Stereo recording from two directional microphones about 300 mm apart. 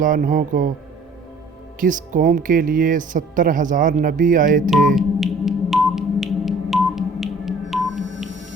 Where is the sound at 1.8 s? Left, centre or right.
Right.